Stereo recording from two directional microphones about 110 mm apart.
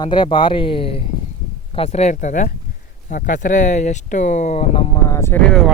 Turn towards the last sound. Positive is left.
turn(degrees=25)  # may be behind; listen again after turning